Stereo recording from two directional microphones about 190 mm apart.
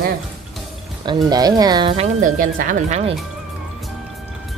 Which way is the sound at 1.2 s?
20° right (ahead or behind).